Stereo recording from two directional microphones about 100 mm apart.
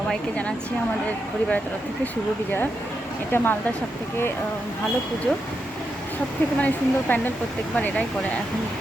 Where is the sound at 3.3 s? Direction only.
20° left (ahead or behind).